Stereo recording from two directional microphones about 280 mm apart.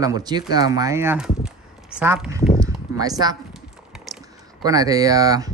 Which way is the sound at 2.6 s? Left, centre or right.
Centre.